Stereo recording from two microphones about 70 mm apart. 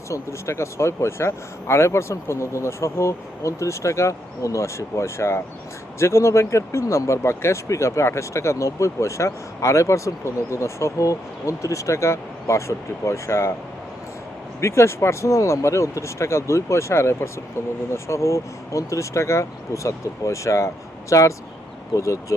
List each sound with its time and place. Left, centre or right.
0.1 s speech: left
14.6 s speech: left